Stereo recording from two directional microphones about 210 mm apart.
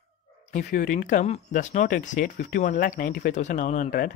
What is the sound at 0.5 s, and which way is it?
Speech, 40° left (ahead or behind).